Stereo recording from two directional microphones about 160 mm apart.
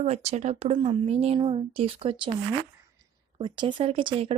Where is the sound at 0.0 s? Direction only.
40° right (ahead or behind).